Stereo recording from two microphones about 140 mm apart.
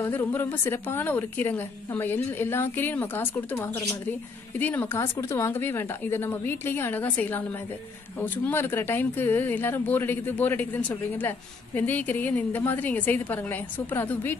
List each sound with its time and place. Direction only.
0.0 s speech: 15° left (ahead or behind)